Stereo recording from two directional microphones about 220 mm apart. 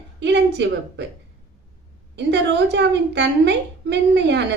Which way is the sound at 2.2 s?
50° right (ahead or behind).